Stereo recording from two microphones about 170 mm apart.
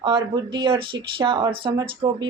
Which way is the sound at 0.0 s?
25° right (ahead or behind).